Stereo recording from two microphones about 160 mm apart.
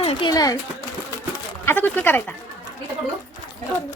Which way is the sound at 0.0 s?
35° left (ahead or behind).